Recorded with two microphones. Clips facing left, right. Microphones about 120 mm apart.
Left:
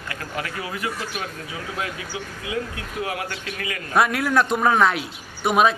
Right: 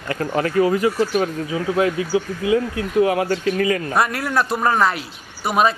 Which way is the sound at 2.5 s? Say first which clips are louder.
Right 11 dB; 30° right (ahead or behind).